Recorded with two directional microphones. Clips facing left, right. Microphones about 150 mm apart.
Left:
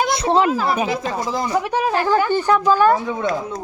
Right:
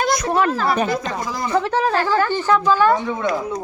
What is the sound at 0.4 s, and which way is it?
Speech, 10° left (ahead or behind).